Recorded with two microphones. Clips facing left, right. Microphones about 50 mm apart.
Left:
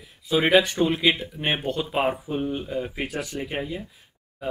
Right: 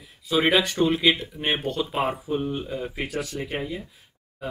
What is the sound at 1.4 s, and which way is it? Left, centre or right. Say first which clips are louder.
Speech: even; centre.